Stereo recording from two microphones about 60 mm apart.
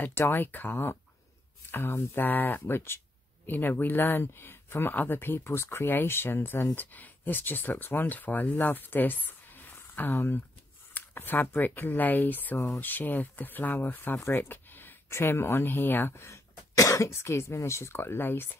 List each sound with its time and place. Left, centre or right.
0.3 s speech: left
15.0 s speech: left
16.3 s cough: left
17.1 s speech: left